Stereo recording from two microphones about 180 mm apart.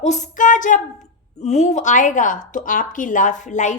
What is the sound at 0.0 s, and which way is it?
A woman's voice, 40° left (ahead or behind).